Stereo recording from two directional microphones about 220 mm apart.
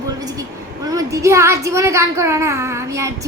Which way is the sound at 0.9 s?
15° right (ahead or behind).